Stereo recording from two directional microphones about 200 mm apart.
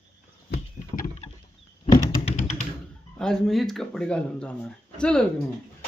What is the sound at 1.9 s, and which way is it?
Computer keyboard, 35° left (ahead or behind).